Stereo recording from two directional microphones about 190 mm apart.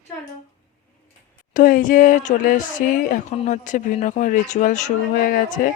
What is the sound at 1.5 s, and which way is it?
Speech, 45° left (ahead or behind).